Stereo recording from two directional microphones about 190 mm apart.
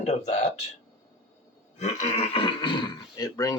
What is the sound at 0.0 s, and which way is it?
Speech, 35° left (ahead or behind).